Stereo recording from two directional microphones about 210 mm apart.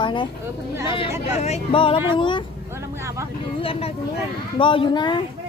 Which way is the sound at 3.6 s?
25° left (ahead or behind).